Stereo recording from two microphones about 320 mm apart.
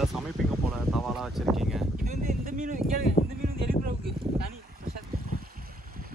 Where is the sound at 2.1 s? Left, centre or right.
Right.